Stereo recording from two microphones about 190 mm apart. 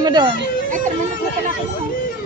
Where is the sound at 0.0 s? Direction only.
20° right (ahead or behind).